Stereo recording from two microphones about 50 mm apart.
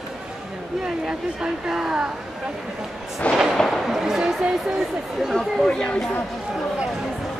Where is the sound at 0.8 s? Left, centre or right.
Centre.